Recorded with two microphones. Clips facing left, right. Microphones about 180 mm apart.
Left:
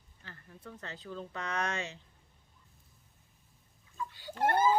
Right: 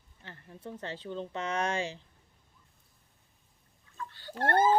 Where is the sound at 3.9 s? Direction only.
10° left (ahead or behind).